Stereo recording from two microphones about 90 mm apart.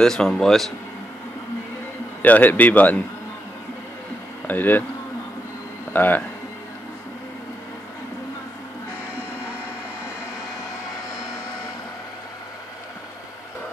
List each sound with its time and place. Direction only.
0.0 s speech: 5° left (ahead or behind)
2.2 s a man's voice: 15° left (ahead or behind)
4.5 s speech: 20° left (ahead or behind)
5.9 s speech: 20° left (ahead or behind)